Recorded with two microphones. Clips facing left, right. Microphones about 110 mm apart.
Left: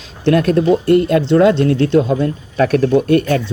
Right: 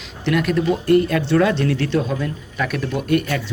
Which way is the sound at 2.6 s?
40° left (ahead or behind).